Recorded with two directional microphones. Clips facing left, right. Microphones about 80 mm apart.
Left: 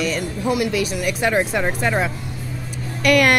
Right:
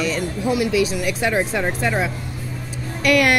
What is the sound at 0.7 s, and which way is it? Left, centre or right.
Speech, left.